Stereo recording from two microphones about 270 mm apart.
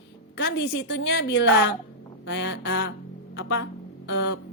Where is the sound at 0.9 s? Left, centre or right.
Left.